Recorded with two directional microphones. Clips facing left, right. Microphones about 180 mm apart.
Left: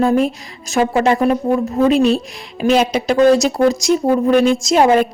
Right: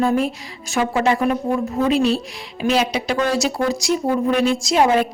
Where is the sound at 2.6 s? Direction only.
45° left (ahead or behind).